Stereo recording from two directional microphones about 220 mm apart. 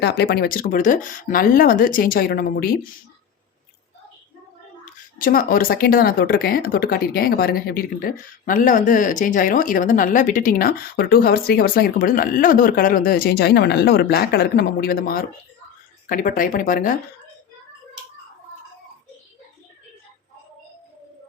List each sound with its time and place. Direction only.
0.0 s speech: 50° left (ahead or behind)
5.1 s speech: 40° left (ahead or behind)